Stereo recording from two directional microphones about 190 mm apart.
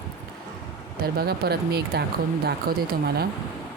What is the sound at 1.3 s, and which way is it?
Speech, 55° right (ahead or behind).